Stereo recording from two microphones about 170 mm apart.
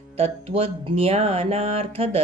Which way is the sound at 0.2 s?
35° right (ahead or behind).